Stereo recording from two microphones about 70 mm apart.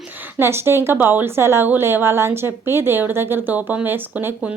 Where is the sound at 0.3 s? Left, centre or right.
Right.